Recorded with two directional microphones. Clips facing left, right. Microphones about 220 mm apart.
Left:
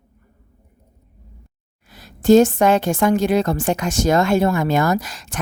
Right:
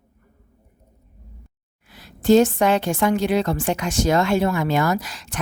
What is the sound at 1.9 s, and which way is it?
A woman's voice, 45° left (ahead or behind).